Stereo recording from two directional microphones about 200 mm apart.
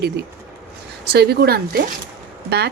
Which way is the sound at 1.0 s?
55° right (ahead or behind).